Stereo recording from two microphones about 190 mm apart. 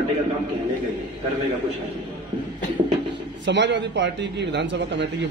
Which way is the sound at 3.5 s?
70° right (ahead or behind).